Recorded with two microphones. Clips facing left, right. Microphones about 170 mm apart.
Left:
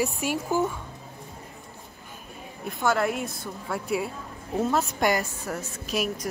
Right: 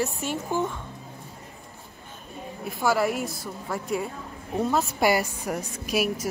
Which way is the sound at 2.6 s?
5° right (ahead or behind).